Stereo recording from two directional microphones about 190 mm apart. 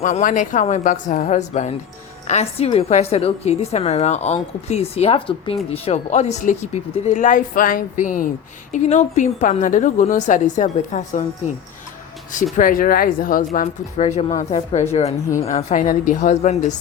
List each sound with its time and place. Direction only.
0.0 s a woman's voice: 40° left (ahead or behind)
12.5 s speech: 45° left (ahead or behind)
13.5 s a woman's voice: 35° left (ahead or behind)